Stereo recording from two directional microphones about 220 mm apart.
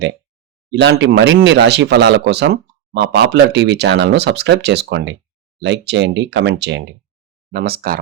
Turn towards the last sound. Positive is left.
turn(degrees=-45)  # may be behind; listen again after turning